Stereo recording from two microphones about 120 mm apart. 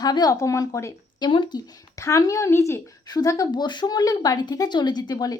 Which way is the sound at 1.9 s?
30° left (ahead or behind).